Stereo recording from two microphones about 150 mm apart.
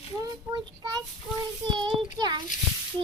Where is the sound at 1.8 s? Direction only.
30° right (ahead or behind).